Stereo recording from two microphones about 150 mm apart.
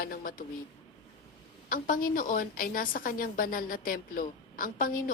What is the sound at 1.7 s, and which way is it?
A woman's voice, 65° left (ahead or behind).